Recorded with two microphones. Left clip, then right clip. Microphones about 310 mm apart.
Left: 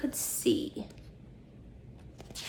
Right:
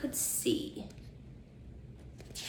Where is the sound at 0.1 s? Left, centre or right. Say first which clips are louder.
Left 3 dB; left.